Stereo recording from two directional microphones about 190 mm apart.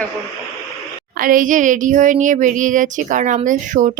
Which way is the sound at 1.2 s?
45° right (ahead or behind).